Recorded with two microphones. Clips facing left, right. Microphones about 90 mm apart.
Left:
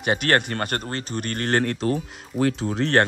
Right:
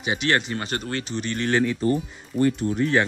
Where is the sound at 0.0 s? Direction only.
50° left (ahead or behind).